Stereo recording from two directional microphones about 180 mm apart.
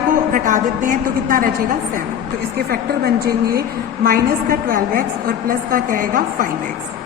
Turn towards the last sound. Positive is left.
turn(degrees=-50)  # may be behind; listen again after turning